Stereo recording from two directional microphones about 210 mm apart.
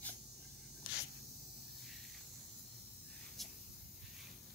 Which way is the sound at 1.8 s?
Centre (ahead or behind).